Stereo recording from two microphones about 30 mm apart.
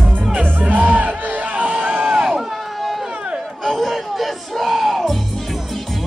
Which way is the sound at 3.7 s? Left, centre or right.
Centre.